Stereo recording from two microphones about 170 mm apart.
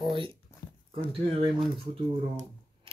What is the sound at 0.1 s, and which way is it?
Speech, 30° right (ahead or behind).